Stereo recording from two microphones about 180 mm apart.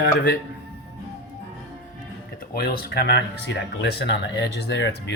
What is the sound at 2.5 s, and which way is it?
Speech, 65° left (ahead or behind).